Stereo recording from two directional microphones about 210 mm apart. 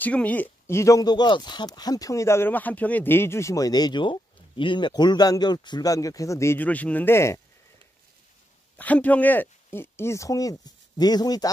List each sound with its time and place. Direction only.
0.0 s speech: 5° left (ahead or behind)
8.7 s speech: 5° left (ahead or behind)